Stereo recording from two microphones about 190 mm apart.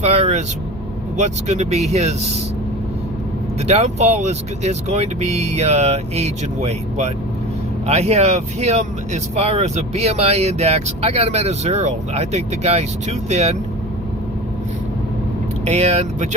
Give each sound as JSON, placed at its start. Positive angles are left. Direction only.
{"t": 0.0, "sound": "speech", "side_deg": -35}
{"t": 3.7, "sound": "speech", "side_deg": -35}
{"t": 15.6, "sound": "speech", "side_deg": -35}